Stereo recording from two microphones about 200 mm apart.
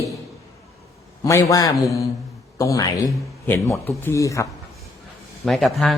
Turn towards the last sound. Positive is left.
turn(degrees=0)  # may be behind; listen again after turning